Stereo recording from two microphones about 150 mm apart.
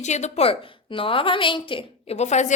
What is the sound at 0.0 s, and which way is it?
A woman's voice, 50° left (ahead or behind).